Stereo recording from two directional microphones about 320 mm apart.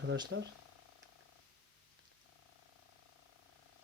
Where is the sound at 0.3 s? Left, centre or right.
Right.